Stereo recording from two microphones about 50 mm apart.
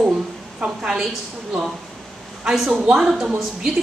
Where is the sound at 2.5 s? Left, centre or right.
Centre.